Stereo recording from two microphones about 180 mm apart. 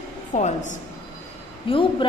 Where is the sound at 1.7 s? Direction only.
30° left (ahead or behind).